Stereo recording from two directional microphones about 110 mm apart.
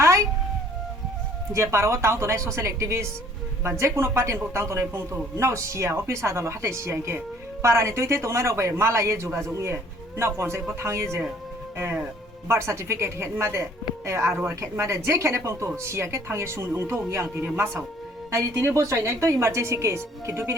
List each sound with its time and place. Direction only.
0.0 s music: 30° right (ahead or behind)
1.5 s speech: 25° right (ahead or behind)
12.5 s speech: 25° right (ahead or behind)